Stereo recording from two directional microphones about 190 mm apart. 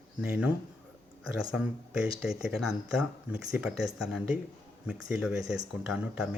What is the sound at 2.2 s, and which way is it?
Speech, 5° right (ahead or behind).